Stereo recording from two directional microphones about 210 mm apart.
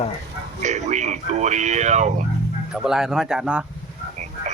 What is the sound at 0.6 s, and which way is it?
Speech, 35° right (ahead or behind).